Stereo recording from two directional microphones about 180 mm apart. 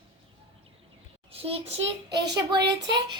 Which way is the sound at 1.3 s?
30° right (ahead or behind).